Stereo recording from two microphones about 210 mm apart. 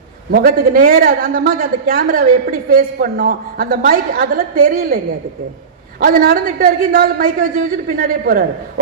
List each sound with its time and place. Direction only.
0.3 s a man's voice: 45° right (ahead or behind)
6.0 s a man's voice: 40° right (ahead or behind)